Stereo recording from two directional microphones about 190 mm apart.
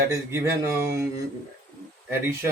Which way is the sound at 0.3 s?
15° right (ahead or behind).